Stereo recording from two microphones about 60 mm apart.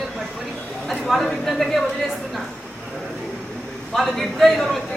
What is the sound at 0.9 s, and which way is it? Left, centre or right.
Speech, centre.